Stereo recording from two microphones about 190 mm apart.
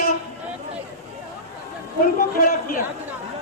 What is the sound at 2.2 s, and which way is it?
Speech, 50° left (ahead or behind).